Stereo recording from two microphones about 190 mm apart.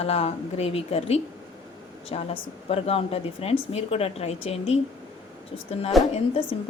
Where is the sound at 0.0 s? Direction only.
35° left (ahead or behind).